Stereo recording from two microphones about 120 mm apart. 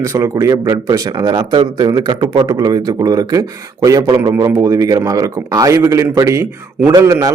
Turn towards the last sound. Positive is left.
turn(degrees=-25)  # may be behind; listen again after turning